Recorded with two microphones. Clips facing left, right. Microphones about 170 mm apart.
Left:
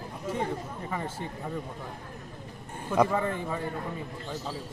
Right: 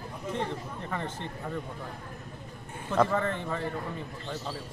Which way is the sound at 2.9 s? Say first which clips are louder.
Left 1 dB; 10° left (ahead or behind).